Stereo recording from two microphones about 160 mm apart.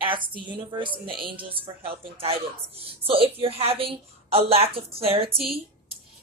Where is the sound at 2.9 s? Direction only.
35° right (ahead or behind).